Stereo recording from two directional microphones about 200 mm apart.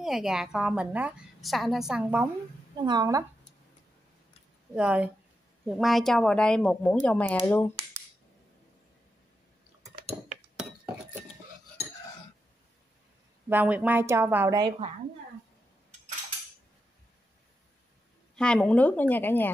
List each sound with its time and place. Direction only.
0.0 s a woman's voice: centre (ahead or behind)
2.8 s speech: 20° right (ahead or behind)
4.7 s a woman's voice: 5° right (ahead or behind); by 7.7 s 10° left (ahead or behind)
13.5 s a woman's voice: 10° right (ahead or behind)
18.3 s a woman's voice: 5° left (ahead or behind)